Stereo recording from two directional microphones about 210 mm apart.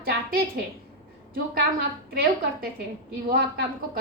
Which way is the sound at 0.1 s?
45° right (ahead or behind).